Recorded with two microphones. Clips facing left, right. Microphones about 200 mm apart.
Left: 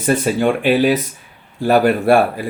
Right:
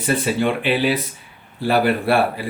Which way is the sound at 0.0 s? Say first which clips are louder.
Left 4 dB; 45° left (ahead or behind).